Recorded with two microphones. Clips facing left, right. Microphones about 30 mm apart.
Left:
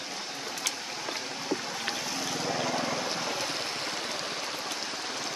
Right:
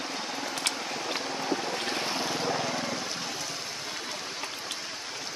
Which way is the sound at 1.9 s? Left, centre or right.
Right.